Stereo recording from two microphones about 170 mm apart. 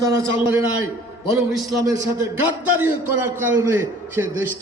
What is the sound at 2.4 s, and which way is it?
A man's voice, 15° right (ahead or behind).